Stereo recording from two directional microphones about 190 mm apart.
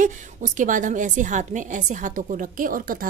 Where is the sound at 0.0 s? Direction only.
40° right (ahead or behind).